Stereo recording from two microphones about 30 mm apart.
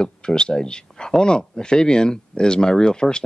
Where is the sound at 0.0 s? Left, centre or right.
Left.